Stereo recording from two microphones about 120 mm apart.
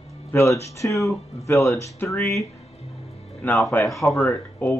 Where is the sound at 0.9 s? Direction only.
Centre (ahead or behind).